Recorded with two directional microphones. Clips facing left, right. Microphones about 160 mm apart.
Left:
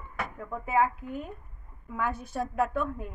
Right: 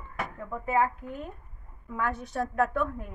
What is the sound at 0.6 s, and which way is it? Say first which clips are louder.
A woman's voice: even; 5° left (ahead or behind).